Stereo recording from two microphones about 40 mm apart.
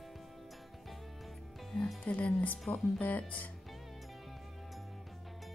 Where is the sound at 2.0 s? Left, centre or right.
Left.